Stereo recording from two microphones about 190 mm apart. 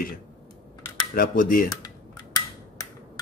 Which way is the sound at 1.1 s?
45° left (ahead or behind).